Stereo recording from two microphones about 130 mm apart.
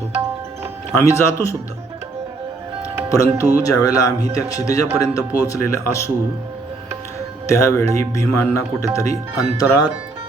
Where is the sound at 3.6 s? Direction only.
25° left (ahead or behind).